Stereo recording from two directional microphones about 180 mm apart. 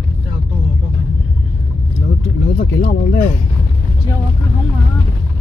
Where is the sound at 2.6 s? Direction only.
65° left (ahead or behind).